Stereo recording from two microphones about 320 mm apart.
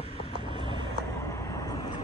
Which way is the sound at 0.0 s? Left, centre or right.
Centre.